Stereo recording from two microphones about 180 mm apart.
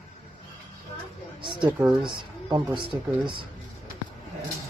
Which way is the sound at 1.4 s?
25° right (ahead or behind).